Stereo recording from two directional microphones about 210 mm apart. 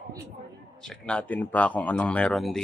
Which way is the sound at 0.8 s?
5° left (ahead or behind).